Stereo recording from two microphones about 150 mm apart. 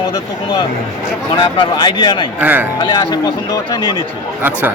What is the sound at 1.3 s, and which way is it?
Speech, 30° left (ahead or behind).